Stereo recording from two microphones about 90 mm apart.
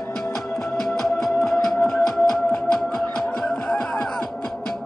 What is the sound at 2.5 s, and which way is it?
Music, 10° left (ahead or behind).